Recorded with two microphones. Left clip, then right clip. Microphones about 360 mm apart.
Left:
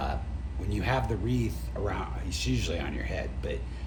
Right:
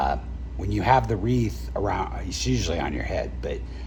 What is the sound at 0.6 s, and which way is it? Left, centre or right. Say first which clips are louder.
Speech: right 10 dB; centre.